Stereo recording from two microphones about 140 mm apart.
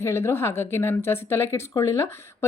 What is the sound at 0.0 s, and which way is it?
A woman's voice, 20° left (ahead or behind).